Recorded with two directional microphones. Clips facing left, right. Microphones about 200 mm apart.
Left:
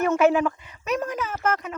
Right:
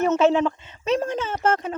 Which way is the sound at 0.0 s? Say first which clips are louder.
Right 1 dB; 20° right (ahead or behind).